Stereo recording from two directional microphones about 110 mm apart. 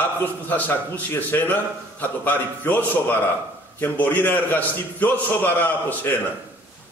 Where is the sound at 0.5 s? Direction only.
15° left (ahead or behind).